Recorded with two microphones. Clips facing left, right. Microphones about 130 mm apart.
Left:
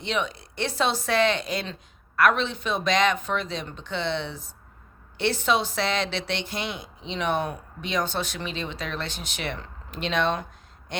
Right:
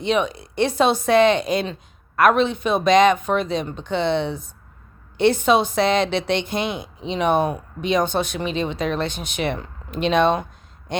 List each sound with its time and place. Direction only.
0.0 s a woman's voice: 15° right (ahead or behind)
4.3 s speech: 55° right (ahead or behind)
5.1 s a man's voice: 20° right (ahead or behind)